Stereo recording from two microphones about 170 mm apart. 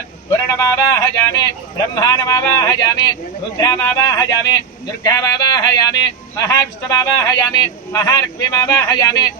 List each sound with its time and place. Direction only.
0.3 s speech: 20° left (ahead or behind)